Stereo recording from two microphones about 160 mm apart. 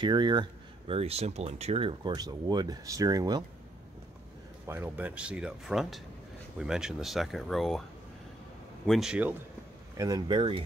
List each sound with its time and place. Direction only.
0.0 s speech: 25° right (ahead or behind)
4.6 s speech: 10° right (ahead or behind)
8.8 s speech: centre (ahead or behind)
9.9 s speech: 25° right (ahead or behind)